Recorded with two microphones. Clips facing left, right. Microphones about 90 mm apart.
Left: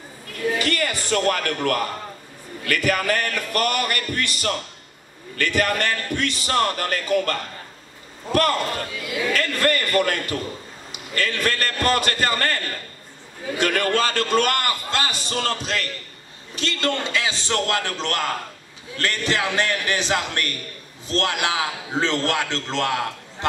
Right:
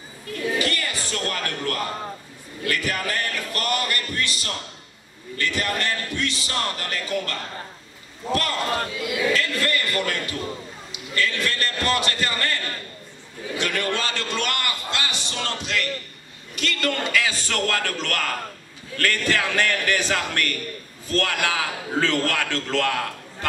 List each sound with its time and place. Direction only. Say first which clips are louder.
0.6 s speech: left 2 dB; 55° left (ahead or behind)
2.7 s music: left 5 dB; 60° left (ahead or behind)
5.5 s a man's voice: left 5 dB; 50° left (ahead or behind)
13.6 s a man's voice: left 5 dB; 45° left (ahead or behind); by 23.0 s 20° left (ahead or behind)